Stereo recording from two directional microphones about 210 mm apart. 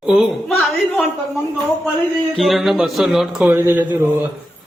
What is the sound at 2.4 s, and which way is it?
Speech, centre (ahead or behind).